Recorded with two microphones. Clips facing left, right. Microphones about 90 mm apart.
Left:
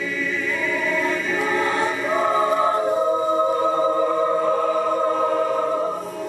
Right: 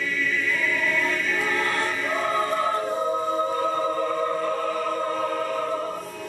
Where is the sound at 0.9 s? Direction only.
15° left (ahead or behind).